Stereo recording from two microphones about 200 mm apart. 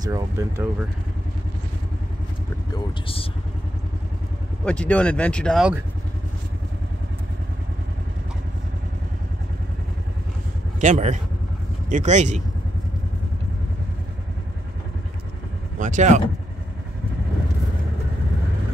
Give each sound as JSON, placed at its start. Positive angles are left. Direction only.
{"t": 0.0, "sound": "speech", "side_deg": -15}
{"t": 2.7, "sound": "speech", "side_deg": 25}
{"t": 4.6, "sound": "speech", "side_deg": 5}
{"t": 10.8, "sound": "speech", "side_deg": -35}
{"t": 15.8, "sound": "speech", "side_deg": -40}